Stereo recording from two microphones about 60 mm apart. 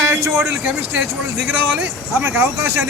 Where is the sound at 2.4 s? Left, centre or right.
Right.